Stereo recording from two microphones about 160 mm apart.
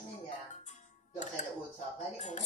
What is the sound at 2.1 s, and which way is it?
Speech, 50° left (ahead or behind).